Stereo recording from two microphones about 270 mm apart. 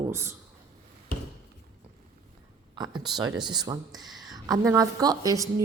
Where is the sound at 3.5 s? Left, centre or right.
Centre.